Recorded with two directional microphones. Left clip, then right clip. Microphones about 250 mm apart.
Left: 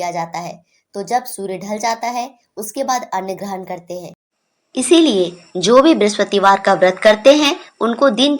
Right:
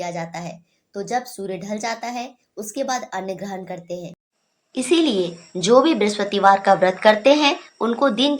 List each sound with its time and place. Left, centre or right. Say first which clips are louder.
0.0 s a woman's voice: left 6 dB; left
4.7 s a woman's voice: left 6 dB; centre